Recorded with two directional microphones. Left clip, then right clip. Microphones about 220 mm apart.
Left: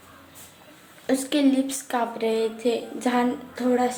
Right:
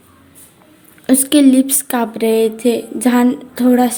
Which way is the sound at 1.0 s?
45° right (ahead or behind).